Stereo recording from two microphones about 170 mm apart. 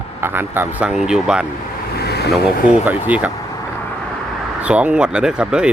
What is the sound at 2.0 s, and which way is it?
Vehicle, 70° left (ahead or behind).